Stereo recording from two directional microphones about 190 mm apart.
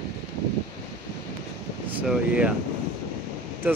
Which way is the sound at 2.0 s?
5° right (ahead or behind).